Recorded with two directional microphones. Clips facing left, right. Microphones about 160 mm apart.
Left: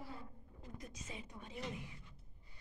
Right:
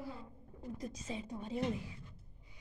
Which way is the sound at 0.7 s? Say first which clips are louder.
Right 8 dB; 35° right (ahead or behind).